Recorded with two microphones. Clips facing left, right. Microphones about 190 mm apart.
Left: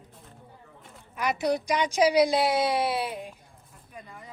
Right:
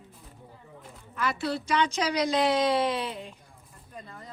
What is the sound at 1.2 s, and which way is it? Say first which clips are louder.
A woman's voice: left 3 dB; 15° left (ahead or behind).